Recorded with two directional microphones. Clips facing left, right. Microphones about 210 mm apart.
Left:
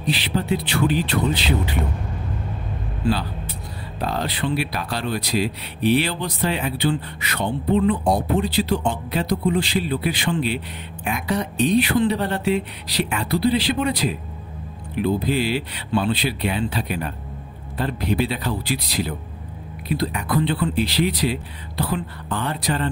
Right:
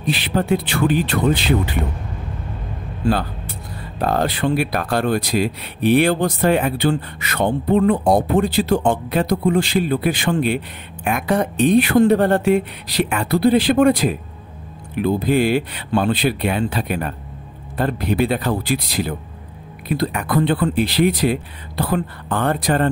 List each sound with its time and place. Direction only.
0.0 s speech: 50° right (ahead or behind)
3.1 s speech: 50° right (ahead or behind)